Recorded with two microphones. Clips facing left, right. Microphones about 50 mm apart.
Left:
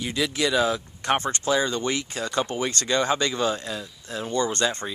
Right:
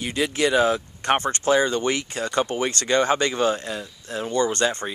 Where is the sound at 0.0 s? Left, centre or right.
Right.